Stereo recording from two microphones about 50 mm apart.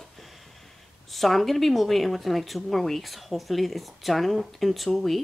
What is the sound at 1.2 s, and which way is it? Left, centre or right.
Speech, centre.